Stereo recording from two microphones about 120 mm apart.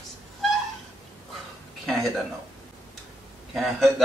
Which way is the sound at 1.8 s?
Centre (ahead or behind).